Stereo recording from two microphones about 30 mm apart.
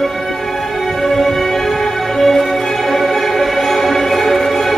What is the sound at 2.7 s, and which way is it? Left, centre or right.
Music, centre.